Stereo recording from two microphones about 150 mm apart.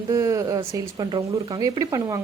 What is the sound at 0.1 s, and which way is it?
A woman's voice, 20° right (ahead or behind).